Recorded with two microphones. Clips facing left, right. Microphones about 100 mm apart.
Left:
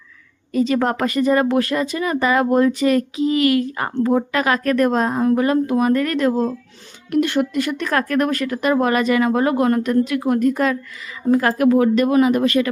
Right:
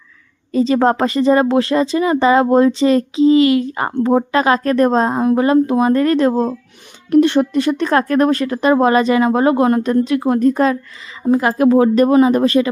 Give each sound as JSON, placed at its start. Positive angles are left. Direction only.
{"t": 0.5, "sound": "speech", "side_deg": -30}